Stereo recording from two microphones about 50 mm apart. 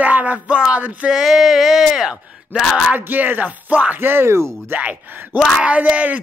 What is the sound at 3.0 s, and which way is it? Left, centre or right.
Speech, right.